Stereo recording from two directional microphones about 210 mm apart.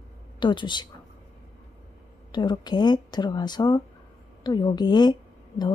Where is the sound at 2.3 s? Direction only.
20° left (ahead or behind).